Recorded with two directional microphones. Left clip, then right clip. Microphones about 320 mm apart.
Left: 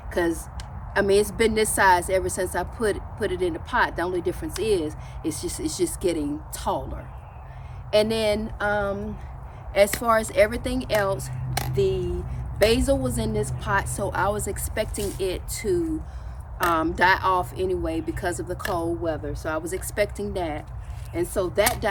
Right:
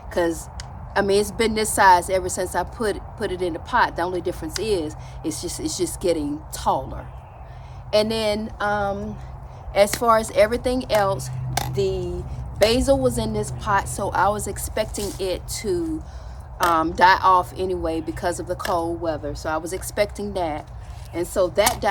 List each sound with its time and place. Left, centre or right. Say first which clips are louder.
0.1 s speech: right 2 dB; centre